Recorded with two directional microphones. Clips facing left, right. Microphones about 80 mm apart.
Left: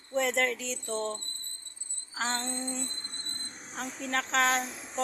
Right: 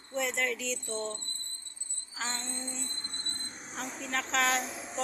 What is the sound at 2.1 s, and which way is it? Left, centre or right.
Female singing, left.